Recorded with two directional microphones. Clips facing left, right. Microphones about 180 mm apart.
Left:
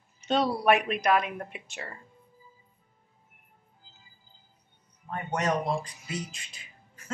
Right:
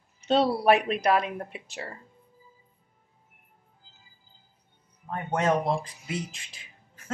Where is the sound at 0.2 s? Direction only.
30° right (ahead or behind).